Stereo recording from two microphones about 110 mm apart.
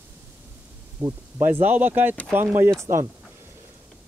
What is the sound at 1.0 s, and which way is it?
Speech, 20° right (ahead or behind).